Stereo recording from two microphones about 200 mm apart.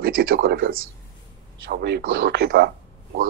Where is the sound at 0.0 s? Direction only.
50° right (ahead or behind).